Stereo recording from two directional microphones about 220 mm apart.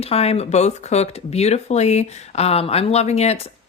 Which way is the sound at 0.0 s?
25° left (ahead or behind).